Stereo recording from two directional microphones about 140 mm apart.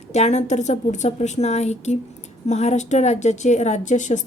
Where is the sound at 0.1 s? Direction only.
55° left (ahead or behind).